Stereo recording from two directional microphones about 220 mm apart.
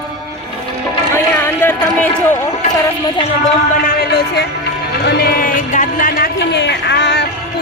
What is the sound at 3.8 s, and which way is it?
Music, 45° left (ahead or behind).